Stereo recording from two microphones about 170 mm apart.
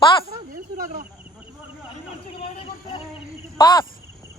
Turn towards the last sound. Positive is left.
turn(degrees=25)  # may be behind; listen again after turning